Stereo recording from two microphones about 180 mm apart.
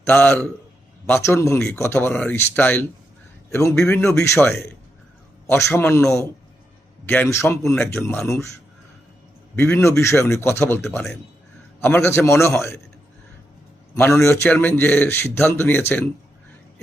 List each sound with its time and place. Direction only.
0.1 s a man's voice: 10° left (ahead or behind)
9.6 s a man's voice: 10° left (ahead or behind)
13.9 s a man's voice: 15° left (ahead or behind)